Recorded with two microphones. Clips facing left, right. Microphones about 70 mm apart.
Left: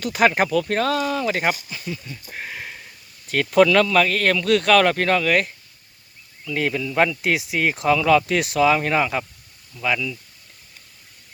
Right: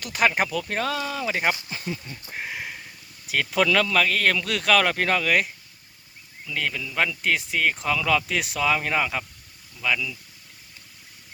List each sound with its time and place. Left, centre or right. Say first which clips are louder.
0.0 s speech: left 4 dB; centre
1.7 s speech: left 1 dB; right
2.3 s a sound: right 1 dB; centre
3.2 s speech: left 6 dB; centre
6.5 s speech: left 6 dB; centre